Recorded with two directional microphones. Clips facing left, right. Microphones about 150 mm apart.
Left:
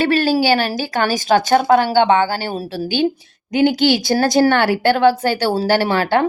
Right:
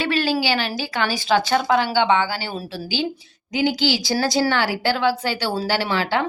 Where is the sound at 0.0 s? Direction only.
45° left (ahead or behind).